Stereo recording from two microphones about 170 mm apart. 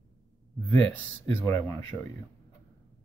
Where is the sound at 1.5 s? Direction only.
15° left (ahead or behind).